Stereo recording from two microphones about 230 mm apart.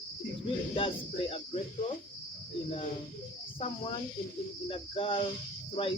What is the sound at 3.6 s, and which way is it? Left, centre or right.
Speech, left.